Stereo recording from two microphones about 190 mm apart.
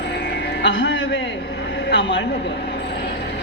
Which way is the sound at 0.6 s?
70° left (ahead or behind).